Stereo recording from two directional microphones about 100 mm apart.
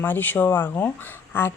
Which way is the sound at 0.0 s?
20° left (ahead or behind).